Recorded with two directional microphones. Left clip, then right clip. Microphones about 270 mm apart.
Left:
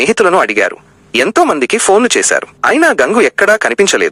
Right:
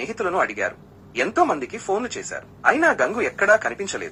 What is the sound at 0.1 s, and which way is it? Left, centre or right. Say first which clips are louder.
Speech: left 9 dB; left.